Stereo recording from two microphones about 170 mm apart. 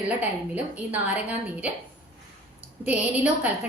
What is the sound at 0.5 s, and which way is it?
Speech, 10° right (ahead or behind).